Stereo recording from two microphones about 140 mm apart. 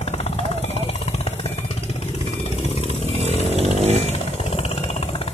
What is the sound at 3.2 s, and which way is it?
Chainsaw, 50° right (ahead or behind).